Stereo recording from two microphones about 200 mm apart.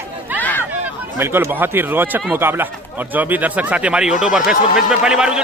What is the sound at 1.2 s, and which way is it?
Speech, 10° right (ahead or behind).